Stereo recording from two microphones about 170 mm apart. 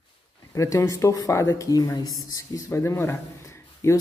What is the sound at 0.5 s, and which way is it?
A man's voice, 20° left (ahead or behind).